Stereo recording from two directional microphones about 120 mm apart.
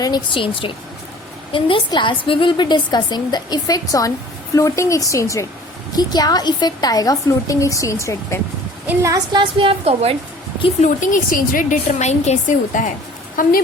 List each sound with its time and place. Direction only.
0.0 s a woman's voice: 40° left (ahead or behind); by 8.4 s 25° left (ahead or behind)
8.9 s a woman's voice: 25° right (ahead or behind); by 10.2 s 55° right (ahead or behind)
10.8 s speech: 90° left
11.7 s a woman's voice: 70° left (ahead or behind); by 12.9 s 90° left